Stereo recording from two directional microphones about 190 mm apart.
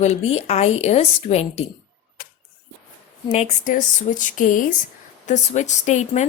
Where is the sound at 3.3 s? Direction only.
35° left (ahead or behind).